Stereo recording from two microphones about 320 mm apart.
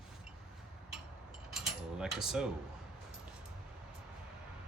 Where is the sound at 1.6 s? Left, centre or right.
Centre.